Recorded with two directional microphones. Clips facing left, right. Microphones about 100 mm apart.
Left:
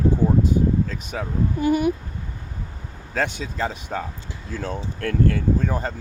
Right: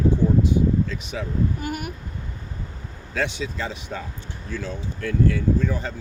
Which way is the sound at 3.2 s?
45° left (ahead or behind).